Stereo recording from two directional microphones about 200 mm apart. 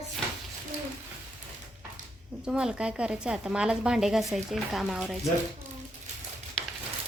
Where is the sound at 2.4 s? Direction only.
5° right (ahead or behind).